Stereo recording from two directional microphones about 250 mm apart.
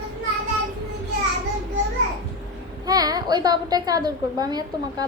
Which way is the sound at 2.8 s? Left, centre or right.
Centre.